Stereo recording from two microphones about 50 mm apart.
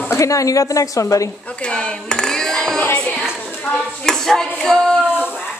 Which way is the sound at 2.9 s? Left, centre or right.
Left.